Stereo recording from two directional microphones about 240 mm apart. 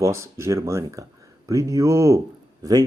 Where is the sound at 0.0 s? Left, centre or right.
Centre.